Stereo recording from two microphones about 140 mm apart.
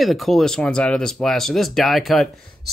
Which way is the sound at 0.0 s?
Centre (ahead or behind).